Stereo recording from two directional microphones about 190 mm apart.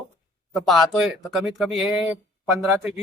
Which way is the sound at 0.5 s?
Centre (ahead or behind).